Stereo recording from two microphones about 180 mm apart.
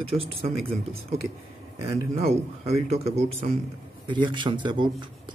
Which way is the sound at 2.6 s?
35° right (ahead or behind).